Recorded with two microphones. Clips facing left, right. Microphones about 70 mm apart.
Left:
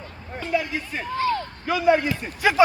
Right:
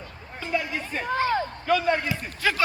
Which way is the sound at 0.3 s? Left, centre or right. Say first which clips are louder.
Left 3 dB; centre.